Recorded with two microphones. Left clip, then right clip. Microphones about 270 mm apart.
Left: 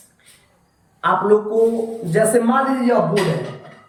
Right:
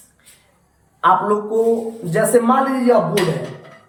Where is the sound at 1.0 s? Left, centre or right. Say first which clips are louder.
Right 1 dB; centre.